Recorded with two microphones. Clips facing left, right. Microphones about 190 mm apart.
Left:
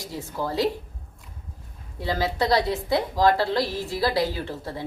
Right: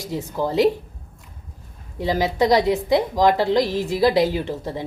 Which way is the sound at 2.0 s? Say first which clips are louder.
Right 5 dB; 20° right (ahead or behind).